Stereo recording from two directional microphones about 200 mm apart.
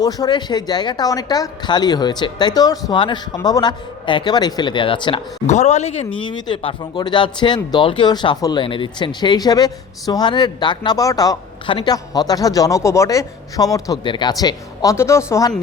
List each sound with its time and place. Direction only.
0.0 s speech: 20° left (ahead or behind)